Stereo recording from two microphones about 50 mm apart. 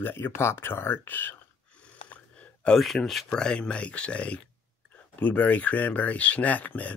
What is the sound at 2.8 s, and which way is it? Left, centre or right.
Speech, centre.